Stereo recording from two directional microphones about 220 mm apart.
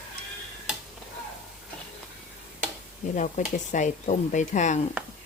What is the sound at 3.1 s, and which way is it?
Speech, 35° left (ahead or behind).